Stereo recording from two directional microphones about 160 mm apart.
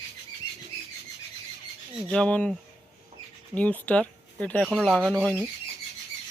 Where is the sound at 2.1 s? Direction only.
5° left (ahead or behind).